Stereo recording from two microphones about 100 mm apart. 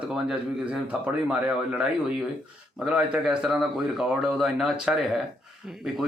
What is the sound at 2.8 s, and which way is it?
A man's voice, 5° right (ahead or behind).